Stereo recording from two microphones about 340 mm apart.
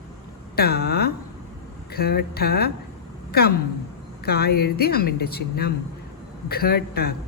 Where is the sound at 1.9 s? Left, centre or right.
Left.